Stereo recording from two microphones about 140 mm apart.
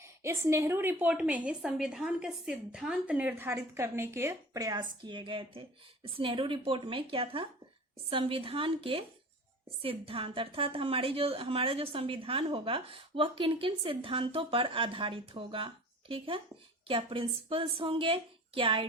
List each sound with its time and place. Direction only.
0.0 s a woman's voice: 20° right (ahead or behind); by 18.9 s 35° right (ahead or behind)